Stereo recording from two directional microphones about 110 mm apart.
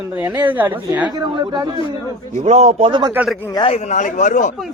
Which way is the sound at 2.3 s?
90° right.